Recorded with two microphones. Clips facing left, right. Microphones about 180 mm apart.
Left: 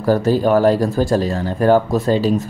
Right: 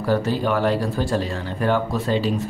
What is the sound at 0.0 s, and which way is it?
Speech, 40° left (ahead or behind).